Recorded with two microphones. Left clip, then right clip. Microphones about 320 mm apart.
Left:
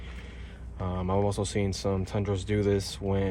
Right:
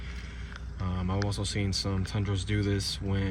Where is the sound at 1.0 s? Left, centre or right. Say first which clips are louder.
Left 7 dB; left.